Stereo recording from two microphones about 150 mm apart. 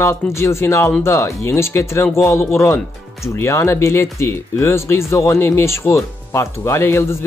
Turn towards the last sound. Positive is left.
turn(degrees=15)  # may be behind; listen again after turning